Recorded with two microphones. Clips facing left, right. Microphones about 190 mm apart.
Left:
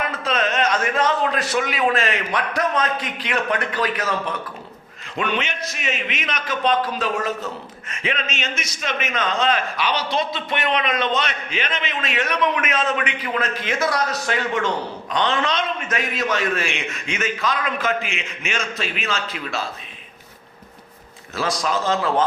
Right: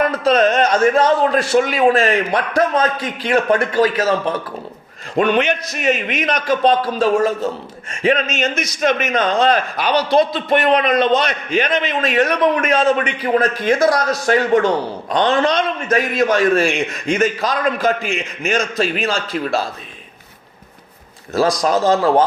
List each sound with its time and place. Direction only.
0.0 s a man's voice: 40° right (ahead or behind)
5.1 s a man's voice: 45° right (ahead or behind)
21.3 s a man's voice: 40° right (ahead or behind)